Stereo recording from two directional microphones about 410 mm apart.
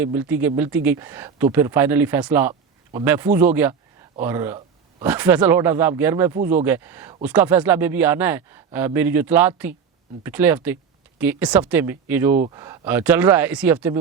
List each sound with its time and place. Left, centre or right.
0.0 s speech: centre